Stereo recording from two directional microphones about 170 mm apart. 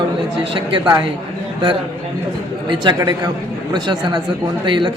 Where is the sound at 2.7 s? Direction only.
25° right (ahead or behind).